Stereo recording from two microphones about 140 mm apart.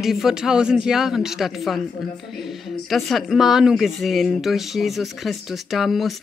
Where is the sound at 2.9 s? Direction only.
Centre (ahead or behind).